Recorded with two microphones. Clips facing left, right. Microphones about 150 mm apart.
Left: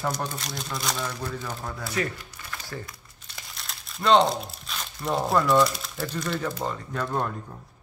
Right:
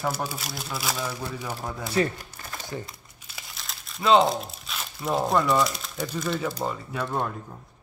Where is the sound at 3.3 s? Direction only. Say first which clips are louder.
Even; centre (ahead or behind).